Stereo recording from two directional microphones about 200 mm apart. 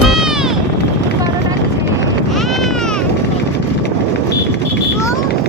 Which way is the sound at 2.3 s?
Centre (ahead or behind).